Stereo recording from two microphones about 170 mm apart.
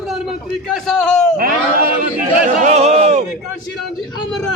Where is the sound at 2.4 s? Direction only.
45° right (ahead or behind).